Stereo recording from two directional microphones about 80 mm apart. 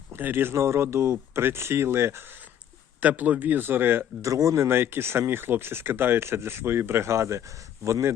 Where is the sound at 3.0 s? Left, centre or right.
Centre.